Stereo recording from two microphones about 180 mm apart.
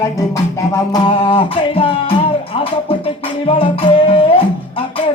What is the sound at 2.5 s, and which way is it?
Music, 30° left (ahead or behind).